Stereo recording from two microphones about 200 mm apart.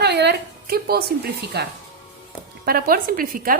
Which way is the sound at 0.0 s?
55° right (ahead or behind).